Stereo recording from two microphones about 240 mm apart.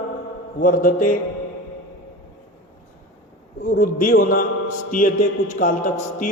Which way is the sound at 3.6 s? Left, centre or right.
Left.